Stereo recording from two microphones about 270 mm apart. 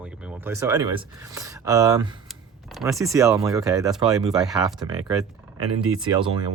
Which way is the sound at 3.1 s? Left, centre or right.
Centre.